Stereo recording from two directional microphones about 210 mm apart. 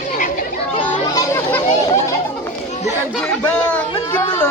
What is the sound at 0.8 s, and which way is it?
Speech, 10° left (ahead or behind).